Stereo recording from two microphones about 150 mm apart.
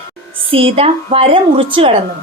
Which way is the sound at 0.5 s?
40° right (ahead or behind).